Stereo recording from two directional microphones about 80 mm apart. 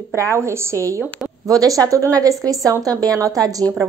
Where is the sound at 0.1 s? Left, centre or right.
Right.